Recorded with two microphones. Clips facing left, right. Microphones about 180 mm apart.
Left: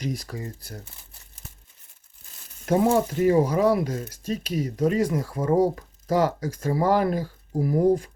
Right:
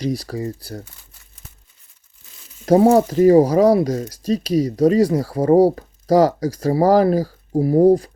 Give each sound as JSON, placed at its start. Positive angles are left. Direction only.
{"t": 0.0, "sound": "speech", "side_deg": -35}
{"t": 2.6, "sound": "frying", "side_deg": -35}
{"t": 3.1, "sound": "speech", "side_deg": -35}